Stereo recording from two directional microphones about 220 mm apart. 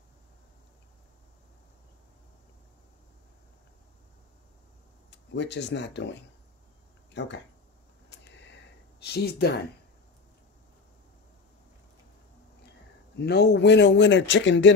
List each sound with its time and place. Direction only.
5.1 s speech: 55° left (ahead or behind)
8.1 s a sound: 55° left (ahead or behind)
9.0 s speech: 50° left (ahead or behind)
13.2 s speech: 50° left (ahead or behind)